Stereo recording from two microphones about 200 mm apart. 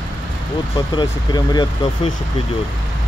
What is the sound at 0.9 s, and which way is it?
Speech, 20° left (ahead or behind).